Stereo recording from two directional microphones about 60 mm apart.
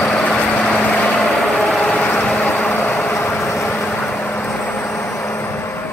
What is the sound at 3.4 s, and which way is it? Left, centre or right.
Vehicle, left.